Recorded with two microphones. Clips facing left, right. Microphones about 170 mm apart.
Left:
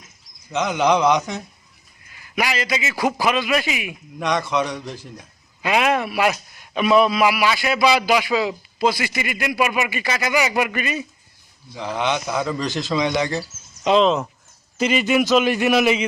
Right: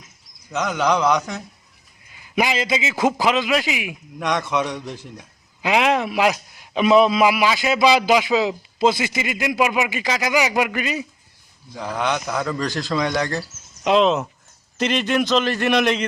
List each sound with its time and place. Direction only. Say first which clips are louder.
0.6 s a man's voice: left 2 dB; 10° left (ahead or behind)
2.4 s a man's voice: right 2 dB; 20° right (ahead or behind)
4.2 s a man's voice: left 1 dB; centre (ahead or behind)
5.6 s a man's voice: right 1 dB; 15° right (ahead or behind)
11.8 s a man's voice: left 1 dB; 15° left (ahead or behind)
13.8 s a man's voice: even; centre (ahead or behind)